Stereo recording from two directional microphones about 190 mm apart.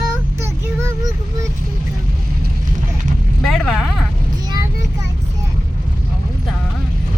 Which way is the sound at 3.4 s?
Centre (ahead or behind).